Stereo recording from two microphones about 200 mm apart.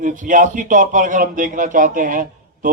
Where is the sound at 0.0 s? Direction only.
40° right (ahead or behind).